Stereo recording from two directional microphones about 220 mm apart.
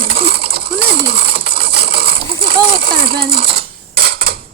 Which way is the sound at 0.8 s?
45° right (ahead or behind).